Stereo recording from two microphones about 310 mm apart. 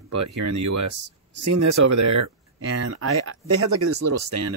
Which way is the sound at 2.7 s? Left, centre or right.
Right.